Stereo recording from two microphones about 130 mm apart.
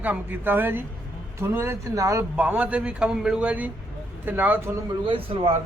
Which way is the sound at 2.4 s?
10° right (ahead or behind).